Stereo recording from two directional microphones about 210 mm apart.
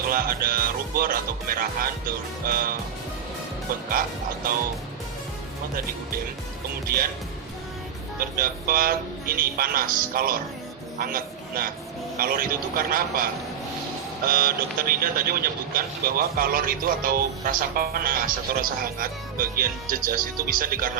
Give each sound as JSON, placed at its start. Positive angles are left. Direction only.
{"t": 0.1, "sound": "speech", "side_deg": -45}
{"t": 6.8, "sound": "speech", "side_deg": -45}
{"t": 8.2, "sound": "a man's voice", "side_deg": -45}
{"t": 14.3, "sound": "speech", "side_deg": -45}